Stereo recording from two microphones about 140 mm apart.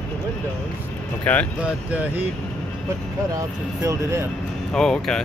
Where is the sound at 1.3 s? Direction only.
10° left (ahead or behind).